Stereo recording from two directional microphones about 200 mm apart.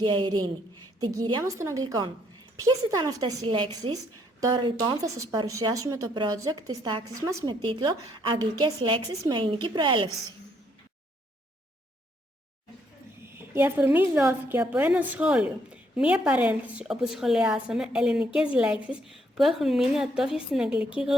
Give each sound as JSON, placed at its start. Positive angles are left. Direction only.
{"t": 0.0, "sound": "a woman's voice", "side_deg": -25}
{"t": 13.5, "sound": "a woman's voice", "side_deg": -10}